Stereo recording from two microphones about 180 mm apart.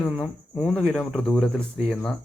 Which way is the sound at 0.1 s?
Centre (ahead or behind).